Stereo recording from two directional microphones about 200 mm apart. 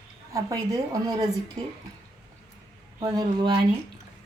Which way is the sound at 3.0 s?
20° right (ahead or behind).